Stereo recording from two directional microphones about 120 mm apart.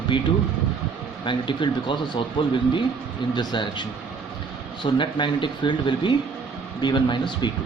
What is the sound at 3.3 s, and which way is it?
Speech, 40° left (ahead or behind).